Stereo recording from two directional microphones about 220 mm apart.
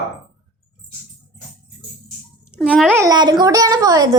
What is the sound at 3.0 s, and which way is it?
A woman's voice, 15° right (ahead or behind).